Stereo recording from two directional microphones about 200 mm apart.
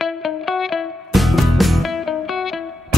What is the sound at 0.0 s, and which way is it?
Music, centre (ahead or behind).